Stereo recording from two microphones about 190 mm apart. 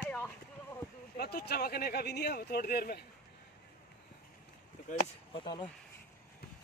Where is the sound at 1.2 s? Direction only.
55° left (ahead or behind).